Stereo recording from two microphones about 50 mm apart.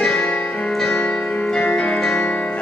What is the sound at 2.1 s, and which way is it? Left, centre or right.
Music, left.